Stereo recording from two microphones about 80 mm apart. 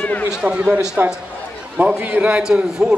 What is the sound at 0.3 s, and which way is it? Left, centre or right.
A man's voice, centre.